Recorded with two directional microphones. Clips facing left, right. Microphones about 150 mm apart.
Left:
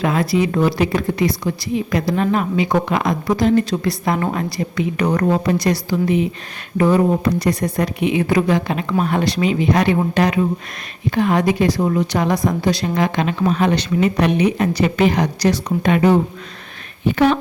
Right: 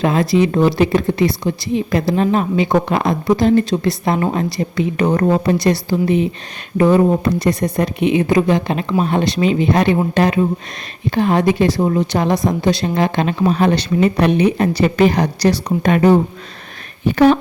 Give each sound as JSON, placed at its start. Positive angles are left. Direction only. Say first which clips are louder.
{"t": 0.0, "sound": "a woman's voice", "louder": "right 3 dB", "side_deg": -25}